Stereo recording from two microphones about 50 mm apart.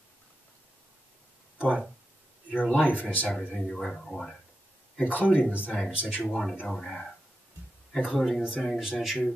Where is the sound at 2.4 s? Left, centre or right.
Left.